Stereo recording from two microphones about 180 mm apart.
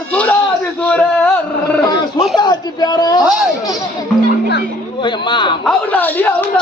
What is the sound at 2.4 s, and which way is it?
Speech, 25° left (ahead or behind).